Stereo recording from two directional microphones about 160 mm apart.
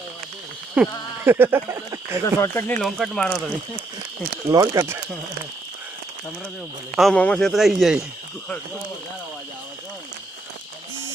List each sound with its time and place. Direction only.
0.8 s speech: 15° right (ahead or behind)
2.4 s speech: 15° left (ahead or behind)
2.8 s speech: 5° left (ahead or behind)
4.4 s speech: 25° right (ahead or behind)
6.9 s speech: centre (ahead or behind)